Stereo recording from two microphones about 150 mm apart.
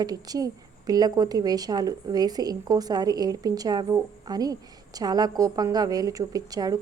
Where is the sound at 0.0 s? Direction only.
25° right (ahead or behind).